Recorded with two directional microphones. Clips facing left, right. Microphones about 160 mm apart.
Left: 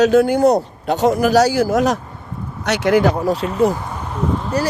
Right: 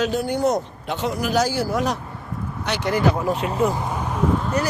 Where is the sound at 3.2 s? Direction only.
35° left (ahead or behind).